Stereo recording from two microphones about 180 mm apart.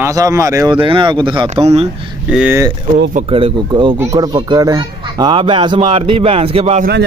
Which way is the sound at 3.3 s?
30° right (ahead or behind).